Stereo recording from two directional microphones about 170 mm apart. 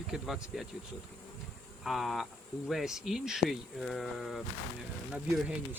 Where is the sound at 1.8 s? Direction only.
Centre (ahead or behind).